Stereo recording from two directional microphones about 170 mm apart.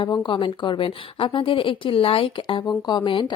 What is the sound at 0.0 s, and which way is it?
A woman's voice, 30° left (ahead or behind).